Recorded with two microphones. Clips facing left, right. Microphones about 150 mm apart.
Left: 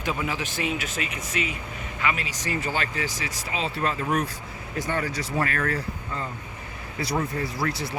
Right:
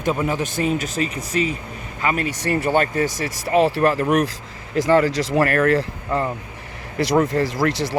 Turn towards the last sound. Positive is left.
turn(degrees=-85)